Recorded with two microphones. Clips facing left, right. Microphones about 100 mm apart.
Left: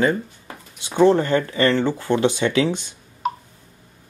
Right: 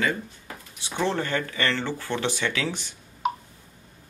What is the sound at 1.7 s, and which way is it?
Speech, 15° left (ahead or behind).